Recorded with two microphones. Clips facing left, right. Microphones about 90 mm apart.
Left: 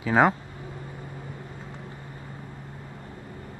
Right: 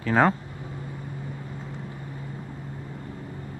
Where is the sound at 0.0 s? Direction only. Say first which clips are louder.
Even; 5° left (ahead or behind).